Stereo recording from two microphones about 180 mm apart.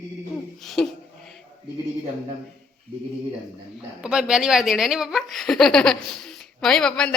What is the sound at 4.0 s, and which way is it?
Speech, 5° right (ahead or behind).